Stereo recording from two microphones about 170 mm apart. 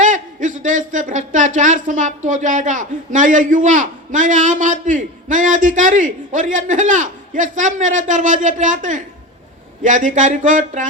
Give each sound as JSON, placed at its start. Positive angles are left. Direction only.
{"t": 0.0, "sound": "speech", "side_deg": -50}